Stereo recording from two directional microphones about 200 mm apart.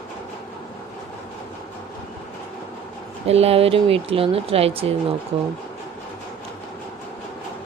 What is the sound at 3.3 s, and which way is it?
Speech, 30° right (ahead or behind).